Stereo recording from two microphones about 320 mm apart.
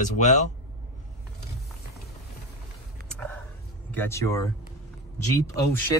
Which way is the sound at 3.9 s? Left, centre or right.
Centre.